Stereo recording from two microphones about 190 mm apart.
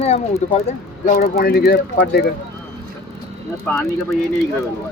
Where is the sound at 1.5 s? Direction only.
55° left (ahead or behind).